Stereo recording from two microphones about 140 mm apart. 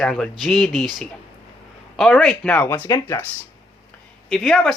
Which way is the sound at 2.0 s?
5° left (ahead or behind).